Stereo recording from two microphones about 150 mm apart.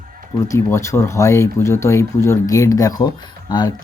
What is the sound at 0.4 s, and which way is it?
Speech, 20° left (ahead or behind).